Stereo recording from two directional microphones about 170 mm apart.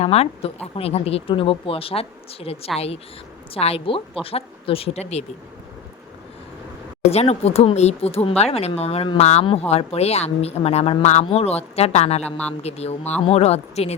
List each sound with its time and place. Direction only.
0.0 s speech: 35° left (ahead or behind)
7.1 s speech: 40° left (ahead or behind)